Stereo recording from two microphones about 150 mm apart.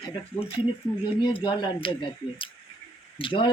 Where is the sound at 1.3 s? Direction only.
35° left (ahead or behind).